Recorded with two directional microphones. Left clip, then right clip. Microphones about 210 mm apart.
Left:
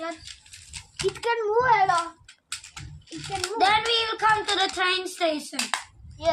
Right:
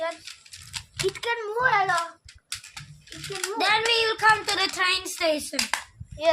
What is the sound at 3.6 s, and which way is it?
Speech, 55° right (ahead or behind).